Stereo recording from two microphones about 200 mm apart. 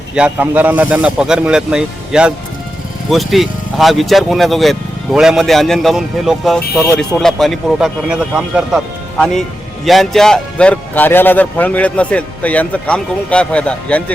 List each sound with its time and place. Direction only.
0.1 s speech: 5° right (ahead or behind)
6.8 s a man's voice: 15° left (ahead or behind)
7.2 s a man's voice: centre (ahead or behind)